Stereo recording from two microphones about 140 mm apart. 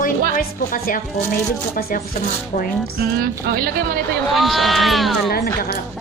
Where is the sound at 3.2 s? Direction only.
90° right.